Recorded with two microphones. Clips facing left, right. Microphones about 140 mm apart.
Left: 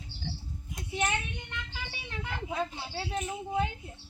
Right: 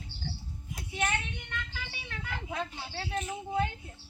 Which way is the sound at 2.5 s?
15° left (ahead or behind).